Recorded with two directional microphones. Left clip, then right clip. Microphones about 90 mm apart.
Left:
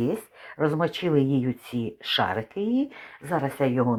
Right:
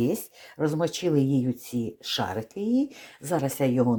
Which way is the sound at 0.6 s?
30° right (ahead or behind).